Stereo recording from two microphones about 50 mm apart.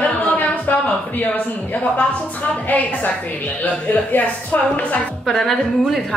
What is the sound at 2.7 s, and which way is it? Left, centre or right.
A woman's voice, left.